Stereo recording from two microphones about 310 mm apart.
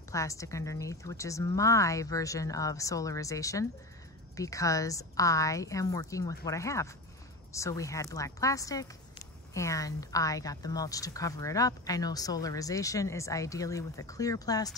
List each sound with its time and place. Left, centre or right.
0.1 s a woman's voice: centre